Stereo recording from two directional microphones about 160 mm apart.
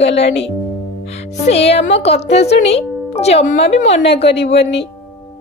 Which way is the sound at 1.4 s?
40° left (ahead or behind).